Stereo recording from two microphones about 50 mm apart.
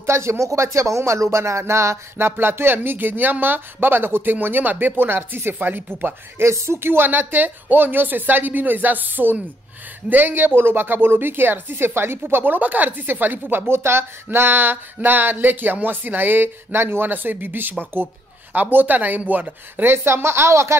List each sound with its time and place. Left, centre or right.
0.0 s speech: right
2.1 s speech: right
6.4 s speech: right
12.5 s speech: right
19.8 s speech: right